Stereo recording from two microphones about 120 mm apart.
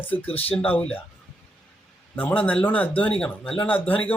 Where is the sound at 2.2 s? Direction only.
15° left (ahead or behind).